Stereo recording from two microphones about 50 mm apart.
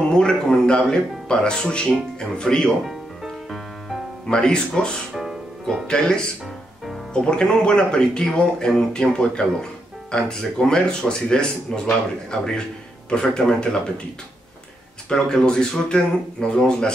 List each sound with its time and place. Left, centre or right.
0.1 s speech: centre
2.8 s music: centre
4.3 s speech: centre
5.1 s music: centre
5.9 s speech: centre
15.0 s speech: centre